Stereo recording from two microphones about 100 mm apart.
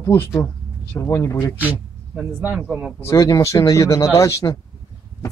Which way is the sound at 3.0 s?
30° left (ahead or behind).